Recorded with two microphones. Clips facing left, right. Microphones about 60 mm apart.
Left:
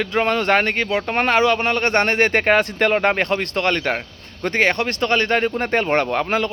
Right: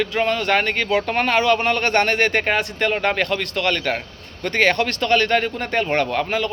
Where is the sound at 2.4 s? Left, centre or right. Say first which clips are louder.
Left 4 dB; left.